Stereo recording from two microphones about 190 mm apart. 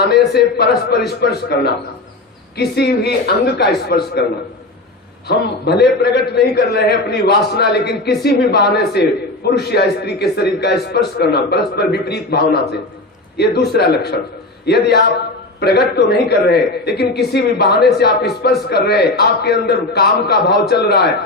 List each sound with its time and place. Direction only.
0.0 s a man's voice: 55° left (ahead or behind)
5.3 s a man's voice: 60° left (ahead or behind)